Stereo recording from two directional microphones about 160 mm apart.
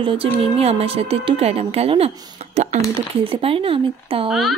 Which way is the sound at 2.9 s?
35° right (ahead or behind).